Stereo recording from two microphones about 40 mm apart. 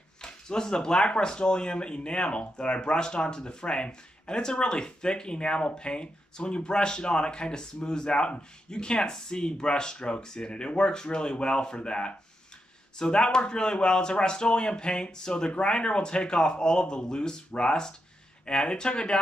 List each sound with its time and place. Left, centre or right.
0.2 s speech: centre